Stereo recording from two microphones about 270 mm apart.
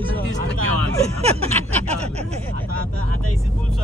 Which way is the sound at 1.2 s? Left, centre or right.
Right.